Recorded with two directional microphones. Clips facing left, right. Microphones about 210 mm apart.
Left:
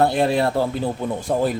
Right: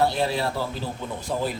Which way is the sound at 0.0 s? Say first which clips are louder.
Left 5 dB; 55° left (ahead or behind).